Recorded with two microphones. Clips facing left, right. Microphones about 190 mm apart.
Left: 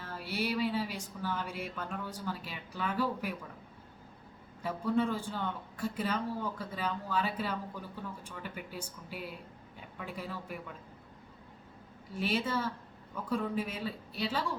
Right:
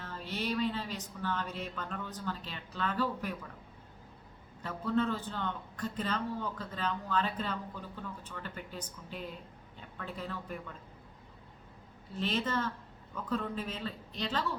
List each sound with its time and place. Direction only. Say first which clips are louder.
0.0 s speech: left 2 dB; 10° left (ahead or behind)
4.6 s a man's voice: left 1 dB; 10° left (ahead or behind)
12.1 s a man's voice: left 1 dB; 10° left (ahead or behind)